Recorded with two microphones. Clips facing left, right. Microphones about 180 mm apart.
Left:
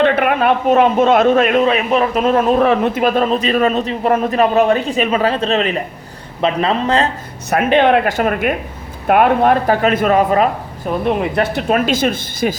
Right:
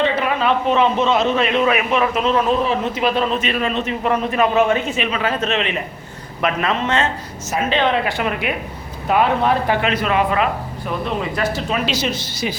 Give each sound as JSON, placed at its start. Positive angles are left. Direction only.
{"t": 0.0, "sound": "a man's voice", "side_deg": 55}
{"t": 1.6, "sound": "a man's voice", "side_deg": 35}
{"t": 7.7, "sound": "speech", "side_deg": 55}
{"t": 11.0, "sound": "speech", "side_deg": 60}